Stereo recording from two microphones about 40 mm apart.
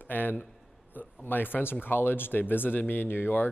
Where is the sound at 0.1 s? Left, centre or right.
Left.